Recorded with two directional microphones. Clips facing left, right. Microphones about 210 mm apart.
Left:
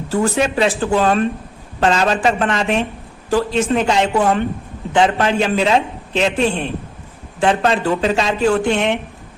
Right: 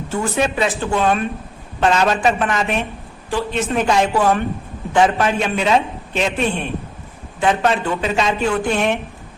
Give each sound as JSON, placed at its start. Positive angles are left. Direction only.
{"t": 0.1, "sound": "a man's voice", "side_deg": 35}